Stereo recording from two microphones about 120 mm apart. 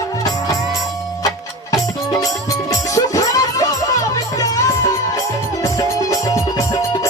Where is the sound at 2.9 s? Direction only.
30° left (ahead or behind).